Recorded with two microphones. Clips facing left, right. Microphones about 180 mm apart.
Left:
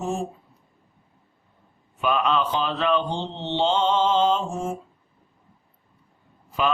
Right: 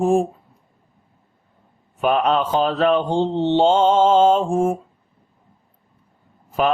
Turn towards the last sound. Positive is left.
turn(degrees=-45)  # may be behind; listen again after turning